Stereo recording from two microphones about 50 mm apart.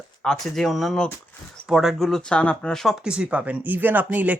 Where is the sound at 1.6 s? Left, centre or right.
Centre.